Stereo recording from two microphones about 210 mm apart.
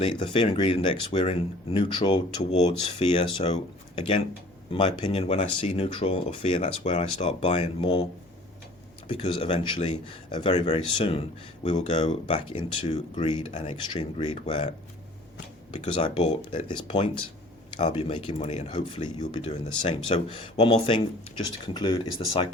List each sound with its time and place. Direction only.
0.0 s speech: 25° left (ahead or behind)
4.7 s speech: 25° left (ahead or behind)
9.0 s speech: 25° left (ahead or behind)
15.8 s speech: 30° left (ahead or behind)